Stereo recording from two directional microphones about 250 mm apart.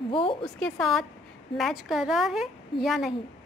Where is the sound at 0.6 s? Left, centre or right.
Centre.